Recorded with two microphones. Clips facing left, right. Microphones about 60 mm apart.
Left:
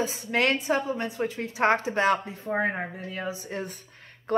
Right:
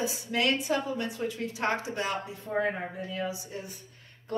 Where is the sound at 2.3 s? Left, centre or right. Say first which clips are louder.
Left 2 dB; left.